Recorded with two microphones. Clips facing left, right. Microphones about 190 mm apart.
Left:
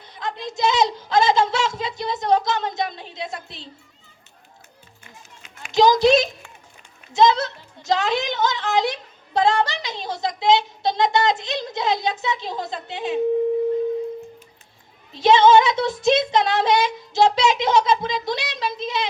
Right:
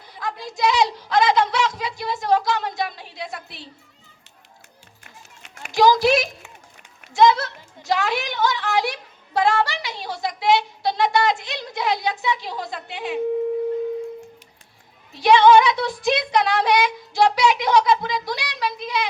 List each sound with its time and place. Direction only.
0.0 s speech: 20° left (ahead or behind)
5.7 s a child's voice: 20° left (ahead or behind)
15.1 s a child's voice: 25° left (ahead or behind)